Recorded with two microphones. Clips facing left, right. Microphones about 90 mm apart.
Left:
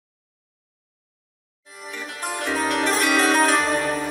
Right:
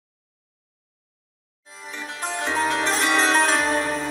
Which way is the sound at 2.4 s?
25° right (ahead or behind).